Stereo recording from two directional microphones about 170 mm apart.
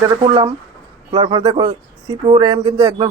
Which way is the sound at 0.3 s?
30° right (ahead or behind).